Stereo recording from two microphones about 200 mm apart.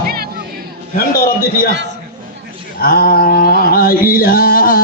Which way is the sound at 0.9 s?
45° left (ahead or behind).